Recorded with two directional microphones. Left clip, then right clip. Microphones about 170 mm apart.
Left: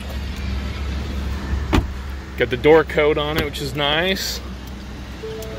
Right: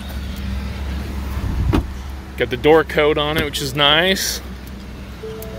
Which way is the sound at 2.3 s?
Centre (ahead or behind).